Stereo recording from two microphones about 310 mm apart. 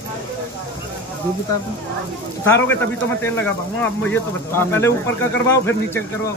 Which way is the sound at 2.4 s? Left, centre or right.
Centre.